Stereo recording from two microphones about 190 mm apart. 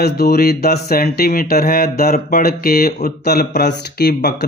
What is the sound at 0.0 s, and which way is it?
Speech, 55° left (ahead or behind).